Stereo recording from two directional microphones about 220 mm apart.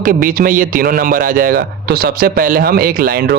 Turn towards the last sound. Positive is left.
turn(degrees=-45)  # may be behind; listen again after turning